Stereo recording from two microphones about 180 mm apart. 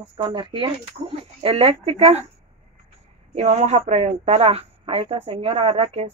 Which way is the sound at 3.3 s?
40° right (ahead or behind).